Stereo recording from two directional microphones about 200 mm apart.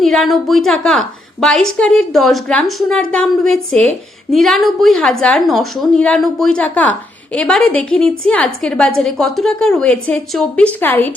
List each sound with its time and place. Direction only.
0.0 s a woman's voice: centre (ahead or behind)